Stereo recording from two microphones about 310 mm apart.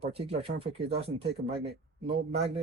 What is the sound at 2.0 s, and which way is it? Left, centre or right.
Speech, centre.